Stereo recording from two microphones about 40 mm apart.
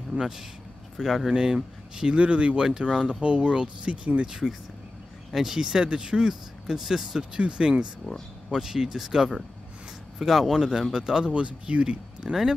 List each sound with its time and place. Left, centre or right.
0.9 s speech: centre
1.3 s speech: centre
2.1 s speech: right
2.6 s speech: centre; by 4.3 s right
5.3 s speech: centre
7.3 s speech: right
8.5 s speech: centre
11.3 s speech: right